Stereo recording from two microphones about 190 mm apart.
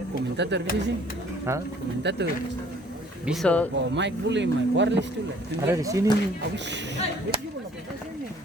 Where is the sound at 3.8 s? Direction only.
70° right (ahead or behind).